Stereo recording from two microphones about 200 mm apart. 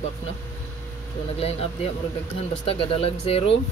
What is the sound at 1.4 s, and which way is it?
Speech, 30° left (ahead or behind).